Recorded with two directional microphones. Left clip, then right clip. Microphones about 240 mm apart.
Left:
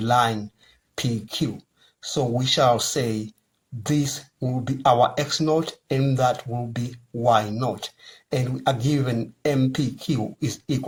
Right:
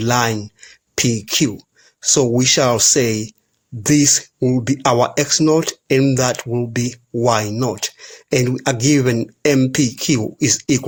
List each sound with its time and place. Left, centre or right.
0.0 s speech: right